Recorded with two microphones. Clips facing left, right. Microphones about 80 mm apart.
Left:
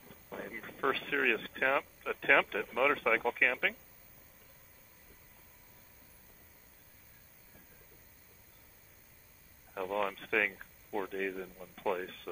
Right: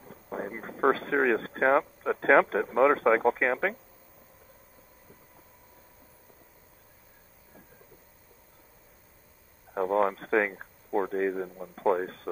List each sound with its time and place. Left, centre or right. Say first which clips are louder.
0.0 s speech: right 8 dB; right
9.8 s speech: right 9 dB; right